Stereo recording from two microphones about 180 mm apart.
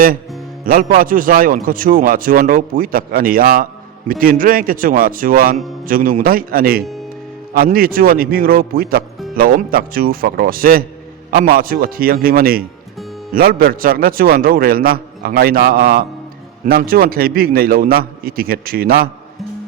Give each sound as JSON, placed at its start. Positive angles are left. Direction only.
{"t": 0.6, "sound": "a man's voice", "side_deg": -50}